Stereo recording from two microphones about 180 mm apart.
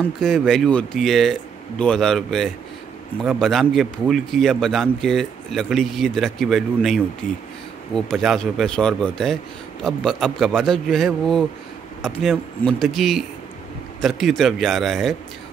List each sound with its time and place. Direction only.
0.2 s a man's voice: centre (ahead or behind)